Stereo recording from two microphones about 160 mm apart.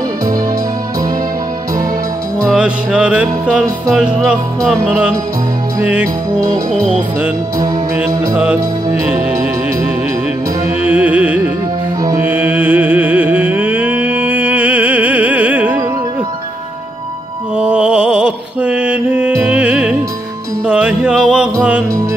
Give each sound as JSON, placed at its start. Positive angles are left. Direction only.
{"t": 2.5, "sound": "music", "side_deg": -5}
{"t": 5.8, "sound": "music", "side_deg": -10}
{"t": 7.5, "sound": "music", "side_deg": -25}
{"t": 10.8, "sound": "carnatic music", "side_deg": -10}
{"t": 12.2, "sound": "music", "side_deg": -10}
{"t": 17.6, "sound": "mantra", "side_deg": -5}
{"t": 20.6, "sound": "music", "side_deg": -5}